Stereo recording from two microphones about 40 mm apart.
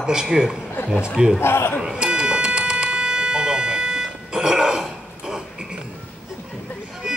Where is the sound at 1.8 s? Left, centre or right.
Right.